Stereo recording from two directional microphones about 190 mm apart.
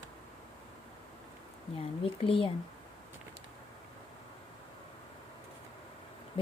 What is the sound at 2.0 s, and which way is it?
Speech, 30° left (ahead or behind).